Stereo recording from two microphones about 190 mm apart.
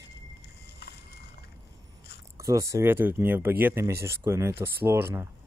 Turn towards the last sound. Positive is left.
turn(degrees=-15)  # may be behind; listen again after turning